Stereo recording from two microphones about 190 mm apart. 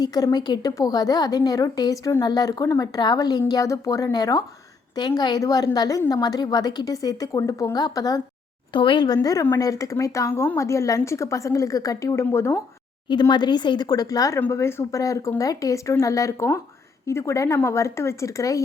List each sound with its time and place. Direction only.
0.0 s a woman's voice: 20° left (ahead or behind)